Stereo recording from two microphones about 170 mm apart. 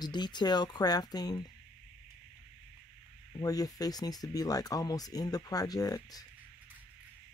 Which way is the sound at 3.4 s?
20° left (ahead or behind).